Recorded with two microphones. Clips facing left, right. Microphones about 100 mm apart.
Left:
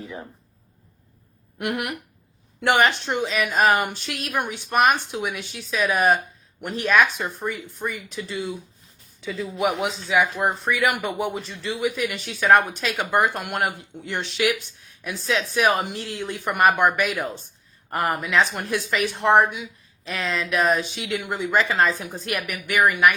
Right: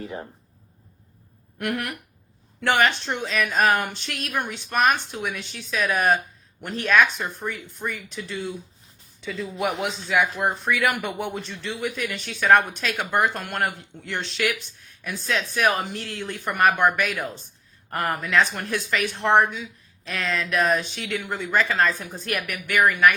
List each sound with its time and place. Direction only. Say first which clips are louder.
1.5 s speech: left 1 dB; 20° left (ahead or behind)
15.5 s speech: left 2 dB; 15° left (ahead or behind)
20.1 s speech: left 1 dB; 5° left (ahead or behind)
20.9 s speech: left 2 dB; 15° left (ahead or behind)